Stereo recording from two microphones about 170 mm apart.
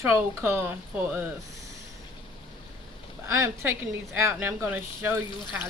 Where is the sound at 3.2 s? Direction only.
15° right (ahead or behind).